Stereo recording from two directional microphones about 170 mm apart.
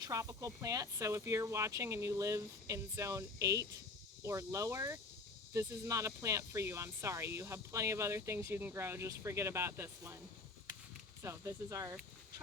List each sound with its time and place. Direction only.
0.0 s speech: 20° right (ahead or behind)
11.2 s speech: 15° right (ahead or behind)